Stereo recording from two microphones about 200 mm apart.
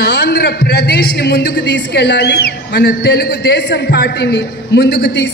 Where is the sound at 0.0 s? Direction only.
55° left (ahead or behind).